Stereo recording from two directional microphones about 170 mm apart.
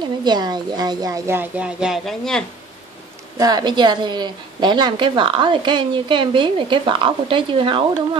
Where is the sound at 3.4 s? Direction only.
25° right (ahead or behind).